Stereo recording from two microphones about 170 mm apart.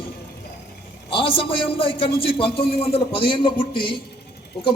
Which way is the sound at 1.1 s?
30° left (ahead or behind).